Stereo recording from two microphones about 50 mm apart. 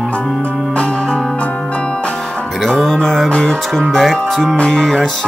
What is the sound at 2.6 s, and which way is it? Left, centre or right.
Music, centre.